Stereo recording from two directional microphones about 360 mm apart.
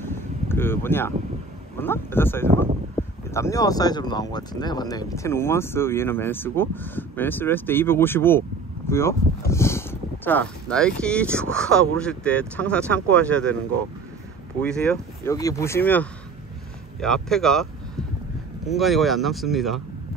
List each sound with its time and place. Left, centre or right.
0.0 s a sound: centre
1.8 s speech: centre
18.7 s speech: centre